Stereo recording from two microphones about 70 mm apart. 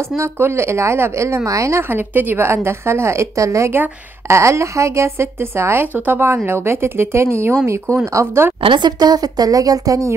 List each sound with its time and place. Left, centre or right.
0.2 s a woman's voice: right
1.8 s a woman's voice: right
8.7 s a woman's voice: right